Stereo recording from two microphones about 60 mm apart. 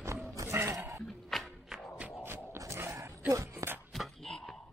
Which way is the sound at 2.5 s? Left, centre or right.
Right.